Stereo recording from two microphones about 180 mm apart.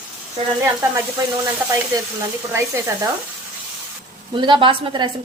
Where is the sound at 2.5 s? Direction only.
15° right (ahead or behind).